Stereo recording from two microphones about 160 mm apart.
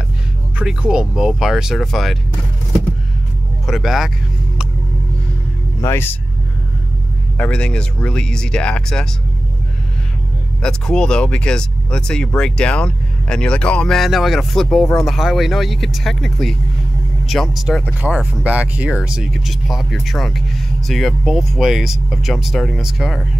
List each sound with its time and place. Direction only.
0.6 s speech: 5° right (ahead or behind)
3.6 s speech: centre (ahead or behind)
5.8 s speech: 15° left (ahead or behind)
7.3 s speech: 5° left (ahead or behind)
10.6 s speech: 5° left (ahead or behind)